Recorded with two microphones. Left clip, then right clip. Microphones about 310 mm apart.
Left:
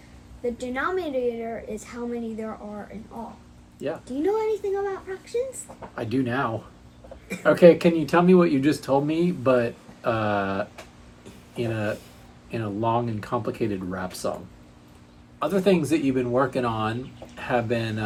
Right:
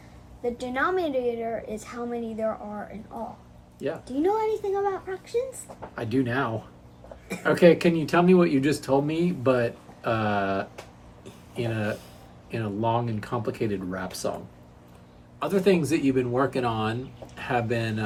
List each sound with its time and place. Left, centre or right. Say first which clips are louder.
0.4 s a woman's voice: right 1 dB; centre
4.2 s a woman's voice: even; centre
5.9 s speech: even; centre
15.4 s speech: left 1 dB; centre